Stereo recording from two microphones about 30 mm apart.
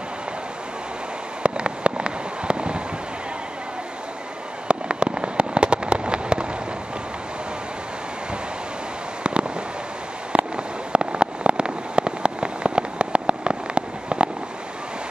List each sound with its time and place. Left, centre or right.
1.4 s fireworks: right
4.6 s fireworks: right
9.2 s fireworks: right